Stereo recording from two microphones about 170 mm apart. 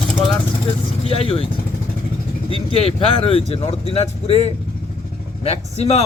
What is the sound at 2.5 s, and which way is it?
Speech, 35° left (ahead or behind).